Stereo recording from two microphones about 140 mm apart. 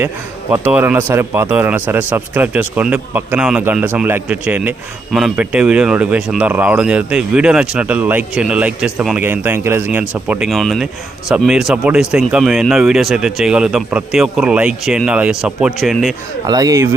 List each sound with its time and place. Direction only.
0.5 s speech: 15° right (ahead or behind)
16.5 s speech: 25° right (ahead or behind)